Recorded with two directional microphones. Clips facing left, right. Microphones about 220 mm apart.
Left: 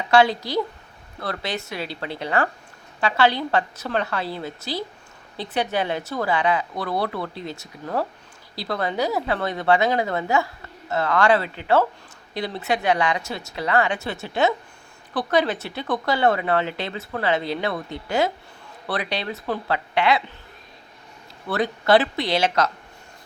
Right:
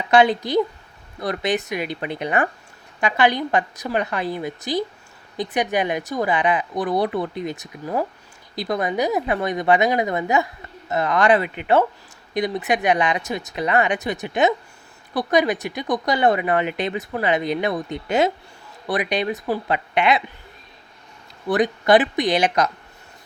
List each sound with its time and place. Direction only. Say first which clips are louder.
0.1 s a woman's voice: right 2 dB; 20° right (ahead or behind)
21.5 s a woman's voice: right 2 dB; 15° right (ahead or behind)